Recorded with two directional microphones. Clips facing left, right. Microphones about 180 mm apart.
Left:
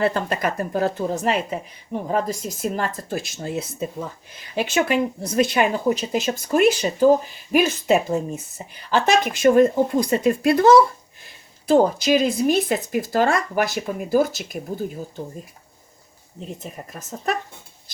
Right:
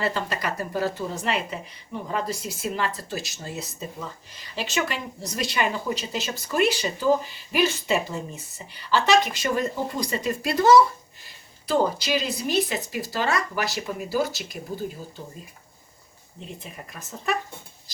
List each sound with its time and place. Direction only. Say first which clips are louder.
0.0 s speech: left 6 dB; 50° left (ahead or behind)
16.6 s speech: left 5 dB; 45° left (ahead or behind)